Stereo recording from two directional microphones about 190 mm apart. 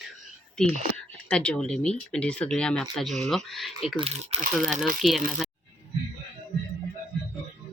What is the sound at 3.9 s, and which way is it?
Speech, 30° right (ahead or behind).